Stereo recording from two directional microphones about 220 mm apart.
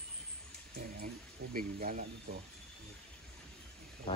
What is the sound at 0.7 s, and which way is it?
Speech, 40° right (ahead or behind).